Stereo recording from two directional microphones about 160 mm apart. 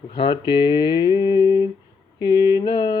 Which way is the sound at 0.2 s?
30° left (ahead or behind).